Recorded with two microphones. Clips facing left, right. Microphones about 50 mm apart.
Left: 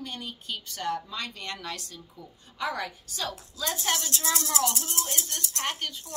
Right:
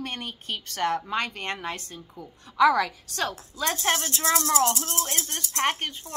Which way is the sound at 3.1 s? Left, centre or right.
Right.